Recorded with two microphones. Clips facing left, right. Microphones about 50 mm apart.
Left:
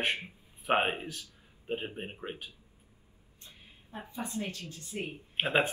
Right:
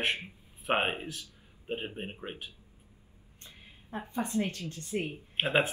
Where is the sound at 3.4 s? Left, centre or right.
Right.